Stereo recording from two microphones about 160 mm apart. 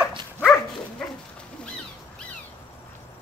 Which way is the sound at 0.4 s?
Centre (ahead or behind).